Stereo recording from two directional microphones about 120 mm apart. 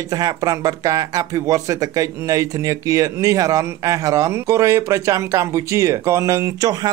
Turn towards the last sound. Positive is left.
turn(degrees=-25)  # may be behind; listen again after turning